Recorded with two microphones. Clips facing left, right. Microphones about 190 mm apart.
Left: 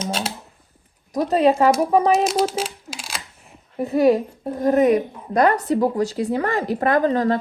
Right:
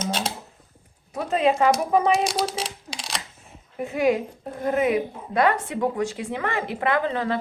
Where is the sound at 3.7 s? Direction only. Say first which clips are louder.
Left 5 dB; 35° left (ahead or behind).